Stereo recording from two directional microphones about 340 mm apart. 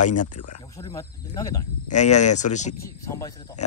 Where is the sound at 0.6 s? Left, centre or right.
Centre.